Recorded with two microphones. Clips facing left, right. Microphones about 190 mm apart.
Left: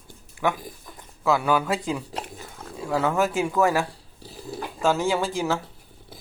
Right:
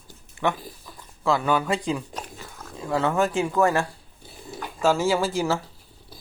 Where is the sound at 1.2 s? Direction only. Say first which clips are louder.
Left 1 dB; 5° left (ahead or behind).